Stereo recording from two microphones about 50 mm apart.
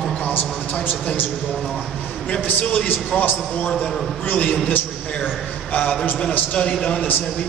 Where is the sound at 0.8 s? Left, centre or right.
Left.